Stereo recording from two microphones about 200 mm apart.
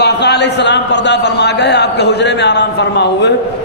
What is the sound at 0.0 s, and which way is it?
A man's voice, 55° left (ahead or behind).